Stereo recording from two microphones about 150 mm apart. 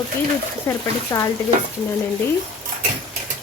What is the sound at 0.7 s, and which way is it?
Speech, 20° left (ahead or behind).